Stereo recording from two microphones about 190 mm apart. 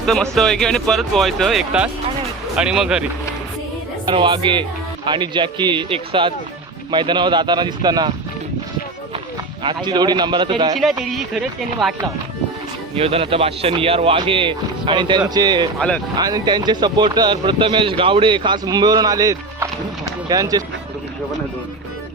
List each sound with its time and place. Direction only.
0.0 s speech: centre (ahead or behind)
4.0 s speech: 25° right (ahead or behind)
9.6 s speech: 25° right (ahead or behind)
10.8 s speech: centre (ahead or behind)
13.0 s speech: 30° right (ahead or behind)